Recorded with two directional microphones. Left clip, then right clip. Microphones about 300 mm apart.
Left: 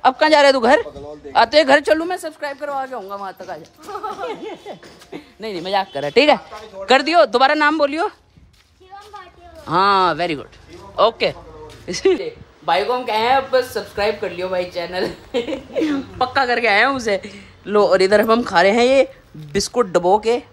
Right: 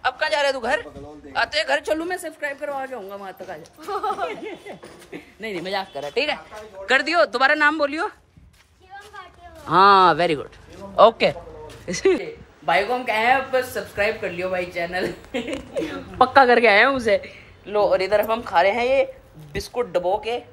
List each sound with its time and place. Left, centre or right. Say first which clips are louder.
0.0 s a man's voice: left 9 dB; left
2.0 s a woman's voice: left 3 dB; centre
3.8 s speech: right 3 dB; right
4.3 s a woman's voice: left 3 dB; centre
5.9 s speech: left 11 dB; left
6.9 s a woman's voice: left 5 dB; centre
9.7 s a woman's voice: right 1 dB; centre
16.2 s a woman's voice: right 4 dB; centre